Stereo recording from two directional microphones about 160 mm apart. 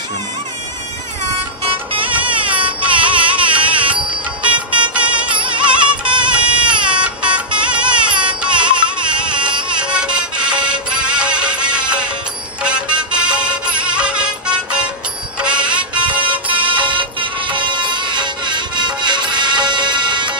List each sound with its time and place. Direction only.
1.6 s music: 35° right (ahead or behind)
2.0 s music: 10° right (ahead or behind)
6.3 s baby cry: 5° right (ahead or behind)
6.9 s music: 5° right (ahead or behind)
8.1 s carnatic music: 30° right (ahead or behind)
8.4 s carnatic music: 5° right (ahead or behind)
8.6 s music: 30° right (ahead or behind)
9.1 s a sound: 5° right (ahead or behind)
9.8 s music: 5° right (ahead or behind)
16.6 s music: 30° right (ahead or behind)